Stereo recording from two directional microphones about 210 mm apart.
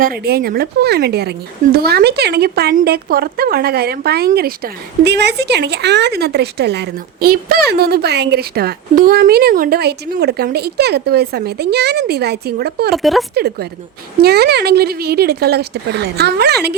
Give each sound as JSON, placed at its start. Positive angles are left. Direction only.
{"t": 0.0, "sound": "a woman's voice", "side_deg": -45}
{"t": 12.9, "sound": "speech", "side_deg": 0}
{"t": 13.3, "sound": "a woman's voice", "side_deg": -50}